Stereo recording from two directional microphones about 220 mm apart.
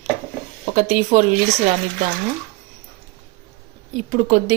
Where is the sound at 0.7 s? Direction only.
30° right (ahead or behind).